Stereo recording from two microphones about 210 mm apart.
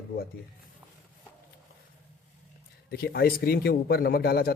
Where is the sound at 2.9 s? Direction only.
50° left (ahead or behind).